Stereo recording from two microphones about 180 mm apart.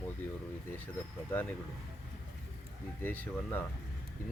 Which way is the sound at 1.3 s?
10° left (ahead or behind).